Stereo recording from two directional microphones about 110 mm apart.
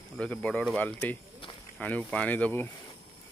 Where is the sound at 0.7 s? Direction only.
15° left (ahead or behind).